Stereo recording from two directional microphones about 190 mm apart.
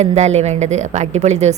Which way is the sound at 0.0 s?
35° right (ahead or behind).